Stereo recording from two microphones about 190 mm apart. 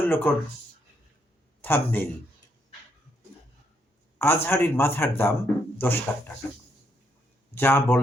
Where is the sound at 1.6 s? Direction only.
10° left (ahead or behind).